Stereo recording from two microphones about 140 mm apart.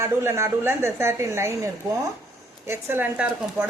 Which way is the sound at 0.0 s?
20° right (ahead or behind).